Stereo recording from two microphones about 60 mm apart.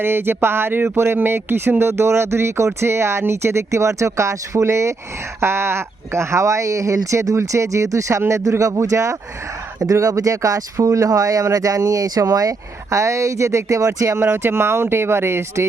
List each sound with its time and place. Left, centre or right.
0.0 s speech: right
14.3 s speech: right